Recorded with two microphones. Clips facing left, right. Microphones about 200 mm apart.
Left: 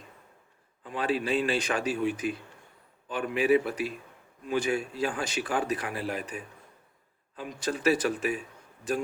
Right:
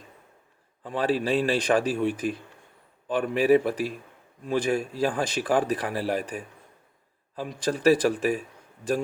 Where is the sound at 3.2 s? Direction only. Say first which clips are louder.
Right 3 dB; 35° right (ahead or behind).